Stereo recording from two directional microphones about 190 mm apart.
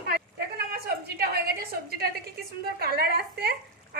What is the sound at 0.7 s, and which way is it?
A woman's voice, 55° right (ahead or behind).